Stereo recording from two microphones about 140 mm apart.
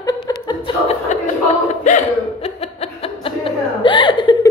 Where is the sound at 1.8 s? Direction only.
55° left (ahead or behind); by 4.4 s 35° left (ahead or behind).